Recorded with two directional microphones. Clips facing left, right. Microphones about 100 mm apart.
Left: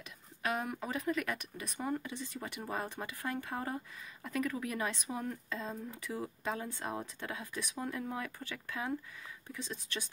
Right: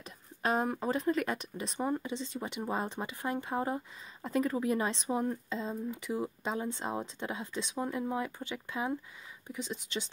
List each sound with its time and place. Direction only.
0.0 s speech: 35° right (ahead or behind)